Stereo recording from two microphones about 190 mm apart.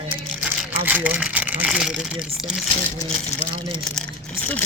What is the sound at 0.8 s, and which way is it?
Speech, 10° right (ahead or behind).